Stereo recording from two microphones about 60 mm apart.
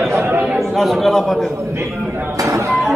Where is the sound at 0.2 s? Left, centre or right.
Right.